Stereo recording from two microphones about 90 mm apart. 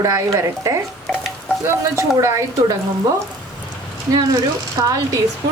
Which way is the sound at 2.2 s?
35° right (ahead or behind).